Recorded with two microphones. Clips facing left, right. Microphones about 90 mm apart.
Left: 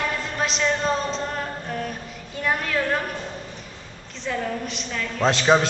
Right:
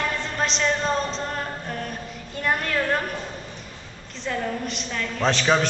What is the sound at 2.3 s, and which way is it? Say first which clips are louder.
Speech: even; centre (ahead or behind).